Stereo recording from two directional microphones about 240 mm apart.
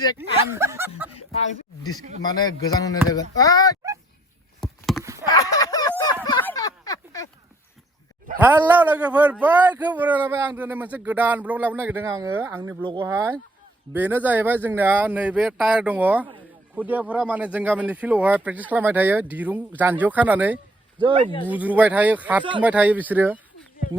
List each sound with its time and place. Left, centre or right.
0.2 s a man's voice: centre
2.2 s speech: centre
4.6 s a sound: centre
5.3 s a sound: centre
8.4 s a man's voice: centre
12.8 s speech: centre
13.9 s a man's voice: centre